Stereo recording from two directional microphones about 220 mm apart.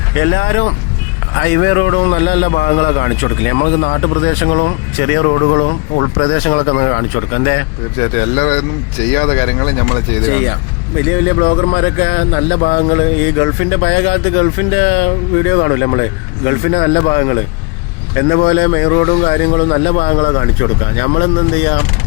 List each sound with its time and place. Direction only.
0.2 s speech: 60° left (ahead or behind)
1.4 s a man's voice: 50° left (ahead or behind)
2.0 s a man's voice: 40° left (ahead or behind)
11.1 s a man's voice: 40° left (ahead or behind); by 21.8 s 60° left (ahead or behind)